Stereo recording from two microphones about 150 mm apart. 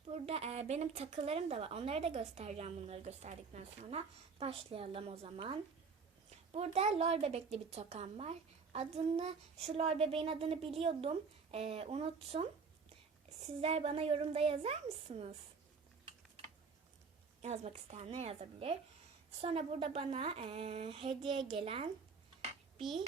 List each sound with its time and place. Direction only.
0.1 s a woman's voice: 45° right (ahead or behind)
17.4 s a woman's voice: 50° right (ahead or behind)